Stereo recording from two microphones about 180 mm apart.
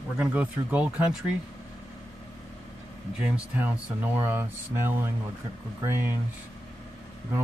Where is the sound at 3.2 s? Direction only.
10° right (ahead or behind).